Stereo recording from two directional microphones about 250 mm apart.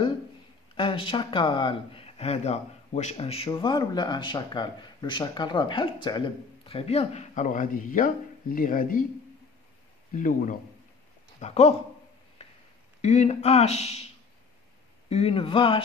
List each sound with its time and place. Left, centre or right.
0.7 s speech: left
10.1 s speech: left
13.0 s speech: left